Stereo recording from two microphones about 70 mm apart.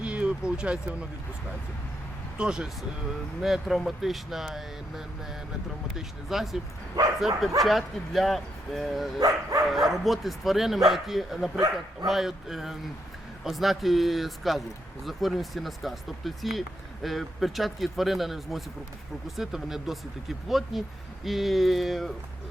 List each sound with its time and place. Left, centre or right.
0.0 s a sound: centre
2.4 s speech: centre
9.2 s speech: right
9.6 s speech: centre